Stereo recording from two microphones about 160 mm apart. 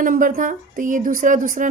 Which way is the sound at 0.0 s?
60° right (ahead or behind).